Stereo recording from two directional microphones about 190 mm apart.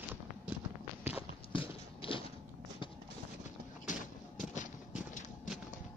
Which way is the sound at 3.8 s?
40° left (ahead or behind).